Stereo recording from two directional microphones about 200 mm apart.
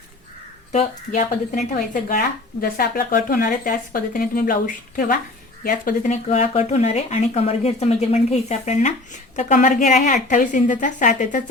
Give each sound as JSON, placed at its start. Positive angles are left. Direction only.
{"t": 0.7, "sound": "speech", "side_deg": 35}